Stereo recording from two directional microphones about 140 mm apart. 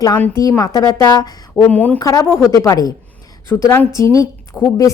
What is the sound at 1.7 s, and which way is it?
Speech, 10° left (ahead or behind).